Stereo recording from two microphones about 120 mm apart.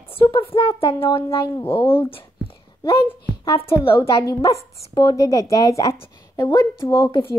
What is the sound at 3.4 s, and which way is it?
Speech, 50° left (ahead or behind).